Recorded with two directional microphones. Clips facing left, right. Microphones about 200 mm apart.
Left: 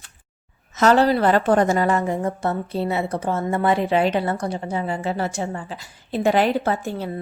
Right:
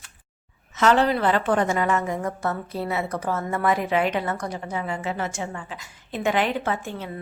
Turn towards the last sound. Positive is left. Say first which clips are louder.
# left 4 dB
turn(degrees=35)  # may be behind; listen again after turning